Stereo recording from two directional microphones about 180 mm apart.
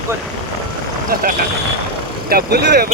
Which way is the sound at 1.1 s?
55° right (ahead or behind).